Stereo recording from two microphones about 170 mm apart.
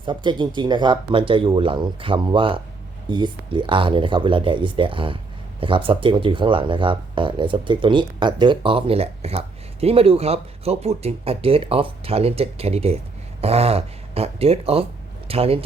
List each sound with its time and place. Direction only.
0.0 s speech: 30° right (ahead or behind)